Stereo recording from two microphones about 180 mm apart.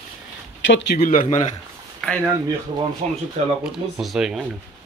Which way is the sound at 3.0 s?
40° right (ahead or behind).